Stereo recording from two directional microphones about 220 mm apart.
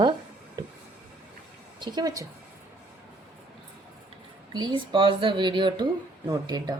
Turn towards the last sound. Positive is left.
turn(degrees=-20)  # may be behind; listen again after turning